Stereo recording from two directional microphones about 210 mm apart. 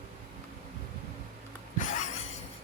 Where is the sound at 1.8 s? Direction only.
35° left (ahead or behind).